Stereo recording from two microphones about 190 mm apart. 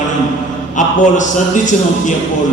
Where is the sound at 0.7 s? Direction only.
40° left (ahead or behind).